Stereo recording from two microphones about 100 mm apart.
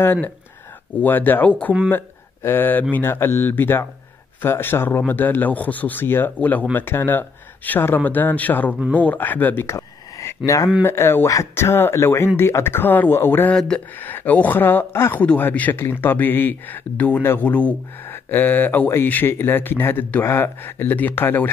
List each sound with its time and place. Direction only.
0.0 s speech: 20° left (ahead or behind)
9.8 s a sound: 30° left (ahead or behind)
10.8 s speech: 25° left (ahead or behind)